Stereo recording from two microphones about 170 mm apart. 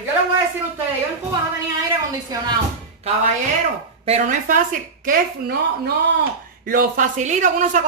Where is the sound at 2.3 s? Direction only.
20° right (ahead or behind).